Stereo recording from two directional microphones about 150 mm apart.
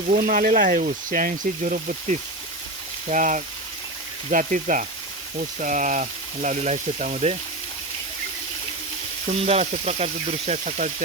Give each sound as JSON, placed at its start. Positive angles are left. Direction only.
{"t": 0.2, "sound": "speech", "side_deg": -70}
{"t": 9.5, "sound": "speech", "side_deg": -45}